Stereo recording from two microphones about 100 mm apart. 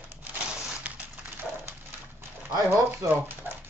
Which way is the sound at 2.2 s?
25° right (ahead or behind).